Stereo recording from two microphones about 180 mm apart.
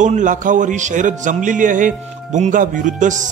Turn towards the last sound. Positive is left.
turn(degrees=-45)  # may be behind; listen again after turning